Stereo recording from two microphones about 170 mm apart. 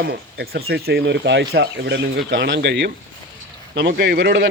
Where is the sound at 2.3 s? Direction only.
85° right.